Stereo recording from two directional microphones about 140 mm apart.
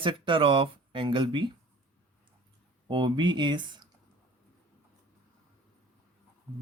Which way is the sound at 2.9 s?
35° right (ahead or behind).